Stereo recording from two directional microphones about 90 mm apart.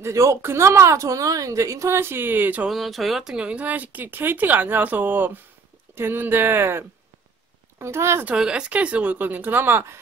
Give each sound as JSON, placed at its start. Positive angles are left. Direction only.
{"t": 0.0, "sound": "a woman's voice", "side_deg": -35}
{"t": 2.7, "sound": "speech", "side_deg": 0}
{"t": 8.3, "sound": "speech", "side_deg": -10}